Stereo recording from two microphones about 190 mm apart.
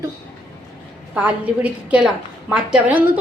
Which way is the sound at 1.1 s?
5° right (ahead or behind).